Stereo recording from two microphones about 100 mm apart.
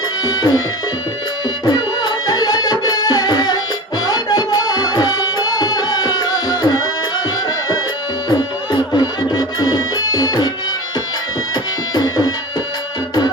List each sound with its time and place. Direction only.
0.3 s speech: 40° left (ahead or behind)
1.6 s music: 45° left (ahead or behind)
8.3 s music: 45° left (ahead or behind)
11.9 s music: 45° left (ahead or behind)